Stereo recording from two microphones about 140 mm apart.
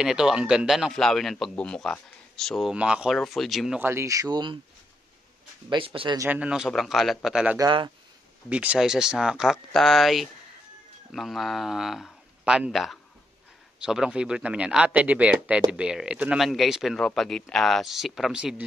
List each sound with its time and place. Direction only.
0.0 s speech: 5° right (ahead or behind)
2.7 s speech: 5° right (ahead or behind)
3.8 s speech: 20° right (ahead or behind)
5.7 s speech: 40° right (ahead or behind)
6.1 s speech: 15° right (ahead or behind)